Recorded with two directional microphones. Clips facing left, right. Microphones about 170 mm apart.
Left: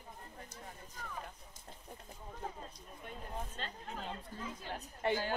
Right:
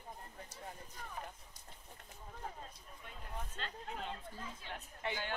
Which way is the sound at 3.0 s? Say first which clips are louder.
Left 4 dB; 45° left (ahead or behind).